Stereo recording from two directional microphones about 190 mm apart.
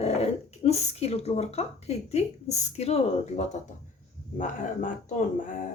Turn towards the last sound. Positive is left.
turn(degrees=45)  # may be behind; listen again after turning